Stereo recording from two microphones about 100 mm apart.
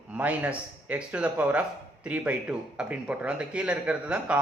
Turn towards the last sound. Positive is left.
turn(degrees=-10)  # may be behind; listen again after turning